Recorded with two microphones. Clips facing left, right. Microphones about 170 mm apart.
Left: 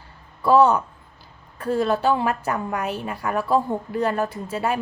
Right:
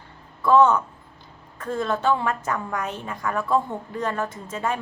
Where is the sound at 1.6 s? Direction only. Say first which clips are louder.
Left 4 dB; 10° left (ahead or behind).